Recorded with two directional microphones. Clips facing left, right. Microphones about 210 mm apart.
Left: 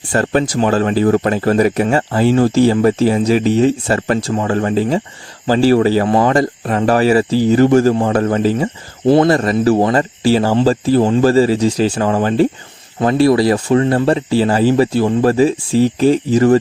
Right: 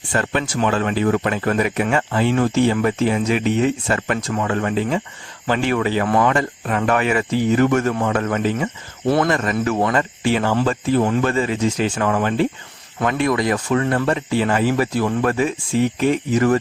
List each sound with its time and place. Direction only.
0.1 s speech: 40° left (ahead or behind)